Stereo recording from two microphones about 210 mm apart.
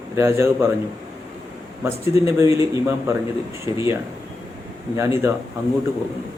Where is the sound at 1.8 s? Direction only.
15° right (ahead or behind).